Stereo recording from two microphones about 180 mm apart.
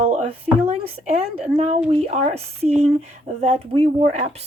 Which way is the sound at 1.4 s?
35° right (ahead or behind).